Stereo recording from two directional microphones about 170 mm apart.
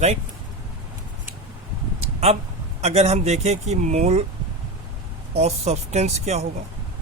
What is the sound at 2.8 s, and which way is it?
Speech, 40° right (ahead or behind).